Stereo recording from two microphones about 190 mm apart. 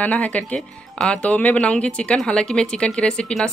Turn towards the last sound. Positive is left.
turn(degrees=5)  # may be behind; listen again after turning